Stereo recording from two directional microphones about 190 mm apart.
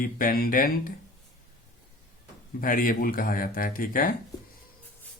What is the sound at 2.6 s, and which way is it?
Speech, 45° left (ahead or behind).